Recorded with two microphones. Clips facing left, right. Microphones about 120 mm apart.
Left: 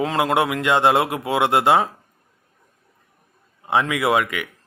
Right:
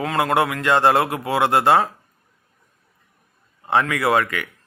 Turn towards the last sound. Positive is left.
turn(degrees=10)  # may be behind; listen again after turning